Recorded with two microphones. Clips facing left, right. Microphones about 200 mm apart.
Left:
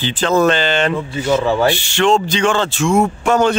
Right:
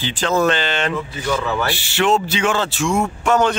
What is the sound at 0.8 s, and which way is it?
Speech, 25° left (ahead or behind).